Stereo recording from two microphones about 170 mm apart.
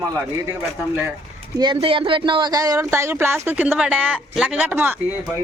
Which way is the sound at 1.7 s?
30° right (ahead or behind).